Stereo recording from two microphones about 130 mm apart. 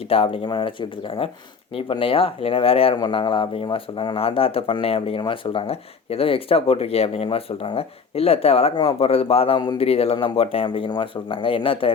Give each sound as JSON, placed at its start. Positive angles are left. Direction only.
{"t": 0.1, "sound": "speech", "side_deg": 45}